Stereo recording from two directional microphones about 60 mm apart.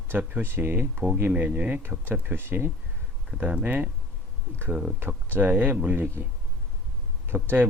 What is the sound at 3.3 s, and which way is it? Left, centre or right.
Speech, right.